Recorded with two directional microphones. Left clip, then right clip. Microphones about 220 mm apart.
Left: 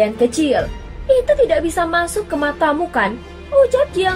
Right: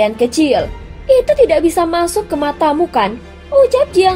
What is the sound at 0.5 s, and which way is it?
A woman's voice, 30° right (ahead or behind).